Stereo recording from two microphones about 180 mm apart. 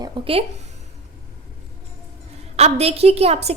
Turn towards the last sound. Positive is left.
turn(degrees=-35)  # may be behind; listen again after turning